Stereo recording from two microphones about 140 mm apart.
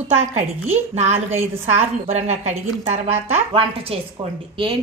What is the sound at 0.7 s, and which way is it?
A woman's voice, 50° right (ahead or behind).